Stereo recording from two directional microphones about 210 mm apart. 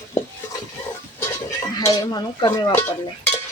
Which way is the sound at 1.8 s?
15° left (ahead or behind).